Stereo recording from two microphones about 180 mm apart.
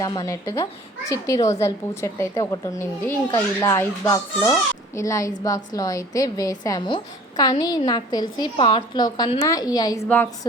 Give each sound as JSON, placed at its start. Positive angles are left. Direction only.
{"t": 0.0, "sound": "a woman's voice", "side_deg": 20}